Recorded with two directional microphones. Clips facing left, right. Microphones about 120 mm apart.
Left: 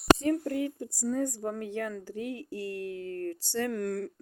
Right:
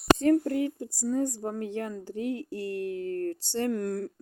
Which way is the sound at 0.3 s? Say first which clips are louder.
Right 5 dB; 35° right (ahead or behind).